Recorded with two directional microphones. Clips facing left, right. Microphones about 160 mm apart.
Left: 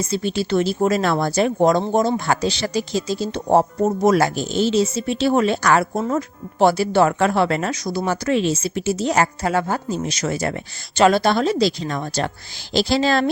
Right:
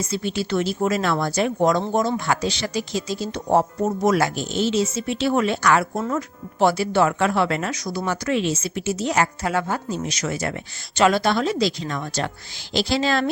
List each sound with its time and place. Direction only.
0.0 s speech: 30° left (ahead or behind)